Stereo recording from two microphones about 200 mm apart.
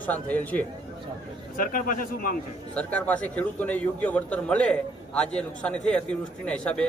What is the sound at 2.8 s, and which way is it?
A man's voice, 5° left (ahead or behind).